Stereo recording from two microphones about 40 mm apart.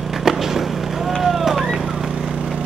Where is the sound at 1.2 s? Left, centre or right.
Centre.